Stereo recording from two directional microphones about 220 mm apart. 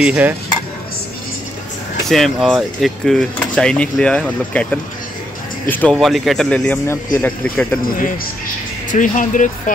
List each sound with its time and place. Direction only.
0.0 s stir: 10° right (ahead or behind)
2.0 s speech: centre (ahead or behind)
8.9 s speech: 35° left (ahead or behind)